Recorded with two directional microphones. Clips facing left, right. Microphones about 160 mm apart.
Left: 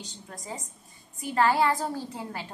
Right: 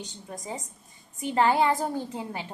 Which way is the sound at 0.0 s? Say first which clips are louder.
Right 4 dB; 20° right (ahead or behind).